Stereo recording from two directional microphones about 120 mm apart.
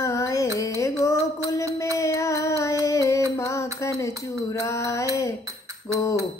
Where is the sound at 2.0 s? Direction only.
25° left (ahead or behind).